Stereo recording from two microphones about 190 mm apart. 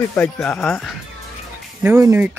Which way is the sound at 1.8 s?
10° right (ahead or behind).